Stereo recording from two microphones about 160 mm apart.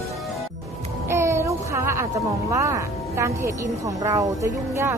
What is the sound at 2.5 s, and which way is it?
Speech, 20° right (ahead or behind).